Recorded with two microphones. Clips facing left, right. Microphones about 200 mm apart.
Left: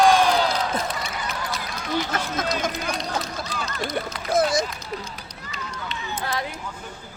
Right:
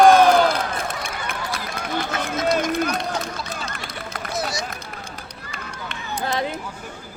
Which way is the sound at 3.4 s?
55° right (ahead or behind).